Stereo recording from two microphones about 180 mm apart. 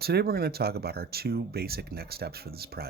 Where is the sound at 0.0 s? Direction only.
60° right (ahead or behind).